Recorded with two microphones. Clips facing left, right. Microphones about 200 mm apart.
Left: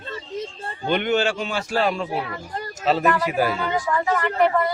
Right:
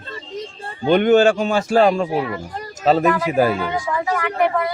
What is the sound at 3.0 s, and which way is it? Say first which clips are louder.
A woman's voice: right 4 dB; 5° right (ahead or behind).